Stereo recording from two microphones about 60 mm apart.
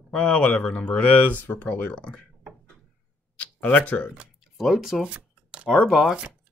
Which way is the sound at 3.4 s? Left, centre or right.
Left.